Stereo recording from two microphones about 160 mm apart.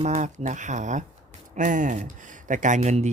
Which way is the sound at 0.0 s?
50° right (ahead or behind).